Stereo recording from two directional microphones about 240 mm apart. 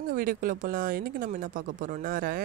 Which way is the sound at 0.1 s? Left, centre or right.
Right.